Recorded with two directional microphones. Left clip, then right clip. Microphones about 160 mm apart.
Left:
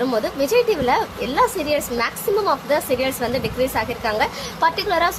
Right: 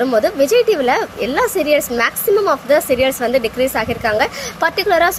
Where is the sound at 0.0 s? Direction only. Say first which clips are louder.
Right 7 dB; 20° right (ahead or behind).